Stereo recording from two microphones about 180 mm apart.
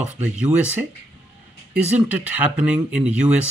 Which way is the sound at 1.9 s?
10° right (ahead or behind).